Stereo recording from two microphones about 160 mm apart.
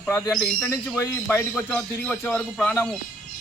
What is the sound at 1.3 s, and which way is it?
A man's voice, 5° left (ahead or behind).